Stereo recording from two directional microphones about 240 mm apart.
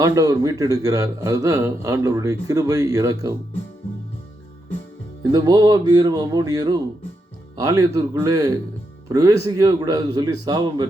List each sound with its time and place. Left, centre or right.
0.0 s a man's voice: centre
5.2 s a man's voice: centre